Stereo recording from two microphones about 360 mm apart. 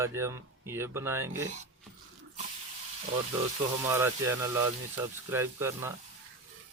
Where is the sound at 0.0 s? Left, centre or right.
Centre.